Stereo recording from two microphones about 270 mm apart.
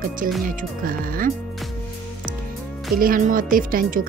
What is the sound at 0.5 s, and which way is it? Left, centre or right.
Speech, right.